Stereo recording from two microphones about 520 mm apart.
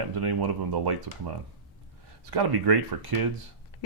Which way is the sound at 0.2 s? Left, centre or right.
Right.